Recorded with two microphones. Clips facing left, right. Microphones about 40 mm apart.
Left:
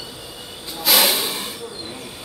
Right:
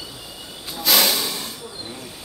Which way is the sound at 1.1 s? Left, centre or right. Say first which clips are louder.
Left 1 dB; left.